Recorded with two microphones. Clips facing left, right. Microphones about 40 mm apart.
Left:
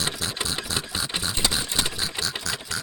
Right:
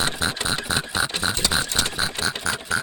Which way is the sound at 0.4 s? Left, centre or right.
Right.